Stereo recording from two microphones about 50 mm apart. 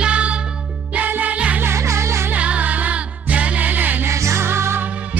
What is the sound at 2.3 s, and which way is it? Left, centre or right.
Music, right.